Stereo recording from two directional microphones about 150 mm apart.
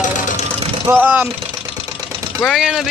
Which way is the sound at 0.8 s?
10° right (ahead or behind).